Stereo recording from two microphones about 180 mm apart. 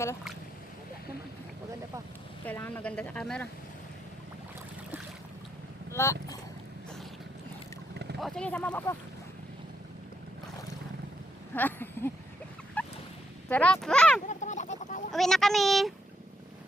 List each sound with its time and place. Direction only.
2.5 s speech: 10° left (ahead or behind)
5.9 s speech: 15° left (ahead or behind)
8.2 s speech: 5° left (ahead or behind)
11.5 s speech: 10° left (ahead or behind)
12.8 s fowl: 10° left (ahead or behind)
13.5 s speech: 5° left (ahead or behind)
14.3 s a sound: 40° left (ahead or behind)
15.1 s speech: centre (ahead or behind)